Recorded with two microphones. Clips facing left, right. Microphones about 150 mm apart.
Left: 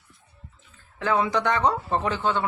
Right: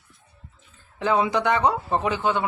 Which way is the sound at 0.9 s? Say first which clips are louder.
Right 2 dB; 15° right (ahead or behind).